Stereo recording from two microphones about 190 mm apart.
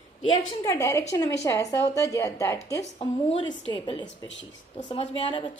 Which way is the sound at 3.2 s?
30° left (ahead or behind).